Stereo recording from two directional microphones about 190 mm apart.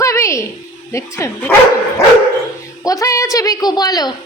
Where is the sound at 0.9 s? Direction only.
15° left (ahead or behind).